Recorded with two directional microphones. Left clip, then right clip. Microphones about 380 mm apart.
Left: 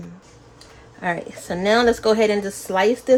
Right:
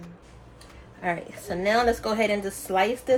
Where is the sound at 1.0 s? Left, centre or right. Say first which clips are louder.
Left 4 dB; left.